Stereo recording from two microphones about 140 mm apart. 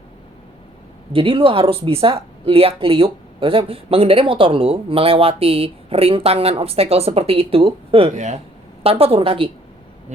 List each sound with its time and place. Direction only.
1.1 s speech: 40° right (ahead or behind)
8.1 s speech: 55° right (ahead or behind)
8.8 s speech: 45° right (ahead or behind)